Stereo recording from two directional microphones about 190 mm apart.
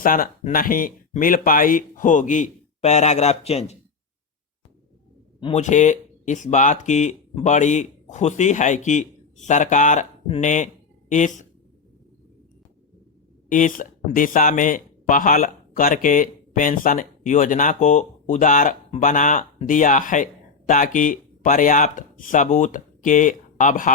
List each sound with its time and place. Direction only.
0.0 s speech: 45° left (ahead or behind)
5.4 s speech: 35° left (ahead or behind)
13.5 s speech: 45° left (ahead or behind)